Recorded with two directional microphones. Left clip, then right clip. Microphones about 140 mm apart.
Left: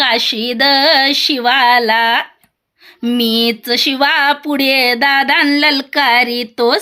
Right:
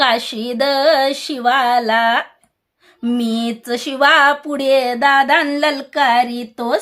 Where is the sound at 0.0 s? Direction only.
10° left (ahead or behind).